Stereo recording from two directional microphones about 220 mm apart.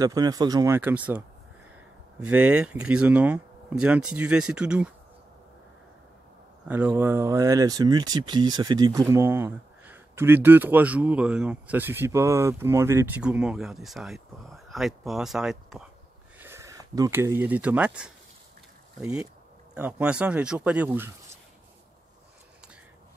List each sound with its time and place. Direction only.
0.0 s speech: 15° right (ahead or behind)
6.7 s speech: 10° right (ahead or behind)